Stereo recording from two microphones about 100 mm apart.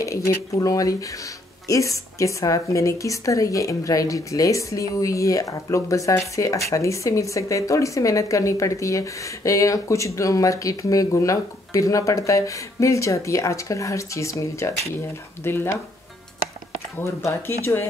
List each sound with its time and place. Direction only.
0.0 s speech: 30° left (ahead or behind)
17.0 s speech: 25° left (ahead or behind)